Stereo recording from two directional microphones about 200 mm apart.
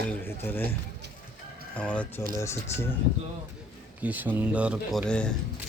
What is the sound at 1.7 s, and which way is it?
Speech, 5° left (ahead or behind).